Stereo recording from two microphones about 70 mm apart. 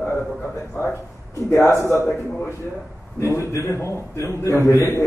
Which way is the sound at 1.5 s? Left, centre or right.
Left.